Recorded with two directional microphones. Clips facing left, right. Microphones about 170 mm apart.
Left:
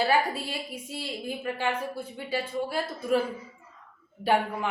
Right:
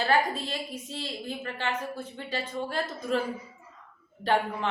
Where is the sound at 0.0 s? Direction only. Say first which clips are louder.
Left 1 dB; 10° left (ahead or behind).